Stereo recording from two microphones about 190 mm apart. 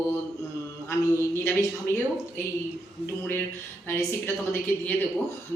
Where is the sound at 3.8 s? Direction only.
10° left (ahead or behind).